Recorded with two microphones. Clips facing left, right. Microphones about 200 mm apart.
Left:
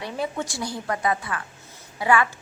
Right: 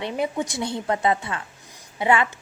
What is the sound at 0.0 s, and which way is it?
A woman's voice, 20° right (ahead or behind).